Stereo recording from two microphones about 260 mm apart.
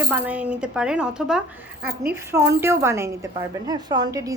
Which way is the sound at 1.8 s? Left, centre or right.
Right.